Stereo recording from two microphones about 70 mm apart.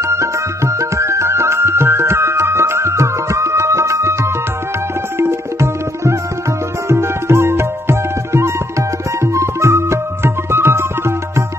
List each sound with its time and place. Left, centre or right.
0.0 s music: right
5.2 s tabla: right
6.9 s music: right